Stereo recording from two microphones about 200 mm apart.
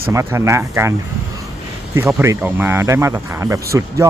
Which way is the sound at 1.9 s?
15° right (ahead or behind).